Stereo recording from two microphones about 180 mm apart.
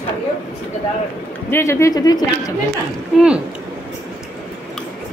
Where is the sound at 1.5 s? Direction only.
15° left (ahead or behind).